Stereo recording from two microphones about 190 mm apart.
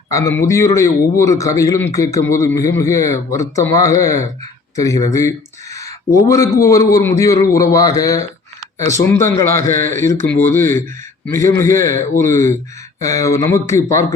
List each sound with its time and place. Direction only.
0.1 s a man's voice: 15° left (ahead or behind)